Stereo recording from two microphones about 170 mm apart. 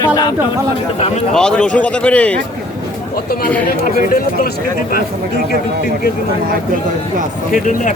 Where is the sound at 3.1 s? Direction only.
60° left (ahead or behind).